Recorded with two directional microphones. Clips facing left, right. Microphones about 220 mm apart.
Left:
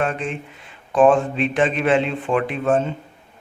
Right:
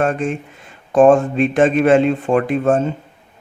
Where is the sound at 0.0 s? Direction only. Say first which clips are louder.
Right 5 dB; 45° right (ahead or behind).